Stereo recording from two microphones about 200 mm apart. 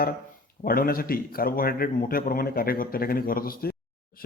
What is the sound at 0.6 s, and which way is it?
A man's voice, 45° left (ahead or behind).